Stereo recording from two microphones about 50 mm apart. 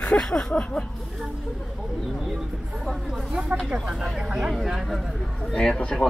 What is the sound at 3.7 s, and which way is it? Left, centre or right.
A man's voice, centre.